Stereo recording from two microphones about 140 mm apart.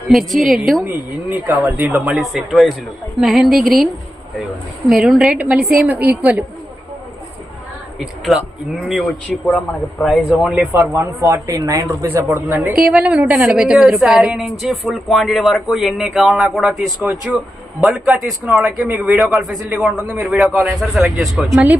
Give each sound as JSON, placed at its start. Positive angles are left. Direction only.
{"t": 0.1, "sound": "a man's voice", "side_deg": 0}
{"t": 0.9, "sound": "a woman's voice", "side_deg": -10}
{"t": 2.1, "sound": "a man's voice", "side_deg": 0}
{"t": 4.9, "sound": "a woman's voice", "side_deg": 0}
{"t": 7.9, "sound": "a man's voice", "side_deg": 0}
{"t": 10.8, "sound": "a man's voice", "side_deg": -25}